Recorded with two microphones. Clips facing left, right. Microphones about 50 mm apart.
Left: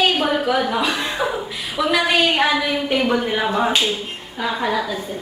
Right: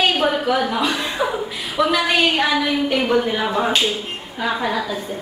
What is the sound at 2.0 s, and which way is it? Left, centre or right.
A woman's voice, centre.